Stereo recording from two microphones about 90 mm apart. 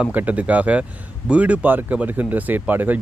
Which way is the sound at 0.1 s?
20° right (ahead or behind).